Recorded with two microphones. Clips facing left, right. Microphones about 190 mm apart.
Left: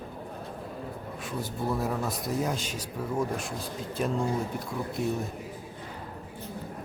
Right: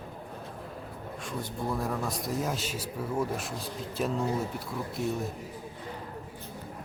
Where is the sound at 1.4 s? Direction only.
5° left (ahead or behind).